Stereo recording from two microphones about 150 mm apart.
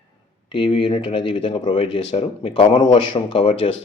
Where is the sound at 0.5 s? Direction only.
35° left (ahead or behind).